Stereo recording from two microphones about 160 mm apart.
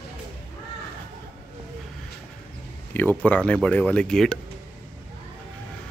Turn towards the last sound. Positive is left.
turn(degrees=5)  # may be behind; listen again after turning